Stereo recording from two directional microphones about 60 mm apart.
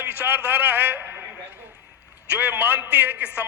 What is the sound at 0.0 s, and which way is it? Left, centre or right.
A man's voice, right.